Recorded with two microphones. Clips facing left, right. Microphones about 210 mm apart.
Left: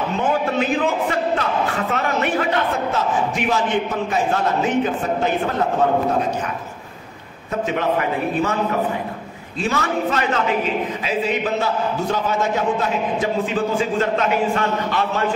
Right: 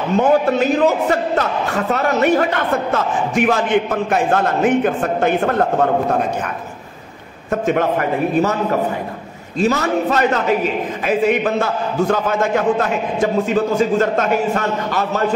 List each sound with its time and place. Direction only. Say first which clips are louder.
0.2 s a man's voice: right 6 dB; 40° right (ahead or behind)
7.6 s a man's voice: right 3 dB; 50° right (ahead or behind)
9.6 s a man's voice: right 5 dB; 40° right (ahead or behind)